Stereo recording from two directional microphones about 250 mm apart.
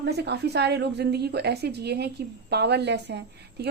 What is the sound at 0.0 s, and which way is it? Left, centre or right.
A woman's voice, right.